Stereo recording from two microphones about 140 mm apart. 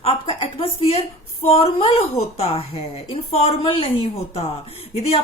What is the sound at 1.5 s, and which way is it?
Speech, 45° left (ahead or behind).